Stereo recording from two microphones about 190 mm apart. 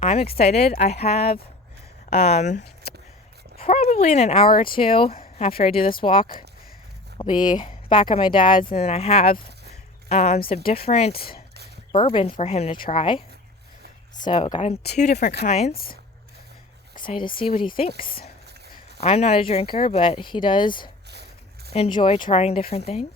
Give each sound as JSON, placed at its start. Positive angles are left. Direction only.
{"t": 0.0, "sound": "a woman's voice", "side_deg": 35}
{"t": 4.4, "sound": "speech", "side_deg": 50}
{"t": 4.7, "sound": "speech", "side_deg": 30}
{"t": 11.1, "sound": "speech", "side_deg": 55}
{"t": 11.9, "sound": "speech", "side_deg": 25}
{"t": 15.7, "sound": "speech", "side_deg": 50}
{"t": 17.0, "sound": "speech", "side_deg": 25}
{"t": 21.1, "sound": "a sound", "side_deg": -60}
{"t": 21.7, "sound": "speech", "side_deg": 30}